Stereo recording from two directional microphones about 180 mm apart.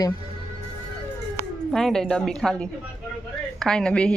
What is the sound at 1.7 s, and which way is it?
A woman's voice, centre (ahead or behind).